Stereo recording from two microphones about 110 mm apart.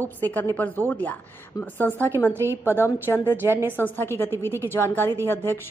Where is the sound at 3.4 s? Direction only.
20° right (ahead or behind).